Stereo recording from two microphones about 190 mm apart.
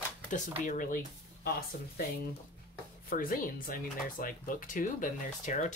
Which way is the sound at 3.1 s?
45° left (ahead or behind).